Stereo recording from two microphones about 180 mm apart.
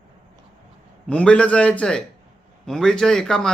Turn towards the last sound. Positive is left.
turn(degrees=5)  # may be behind; listen again after turning